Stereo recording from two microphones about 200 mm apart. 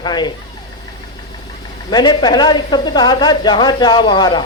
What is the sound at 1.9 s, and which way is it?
Speech, 20° left (ahead or behind).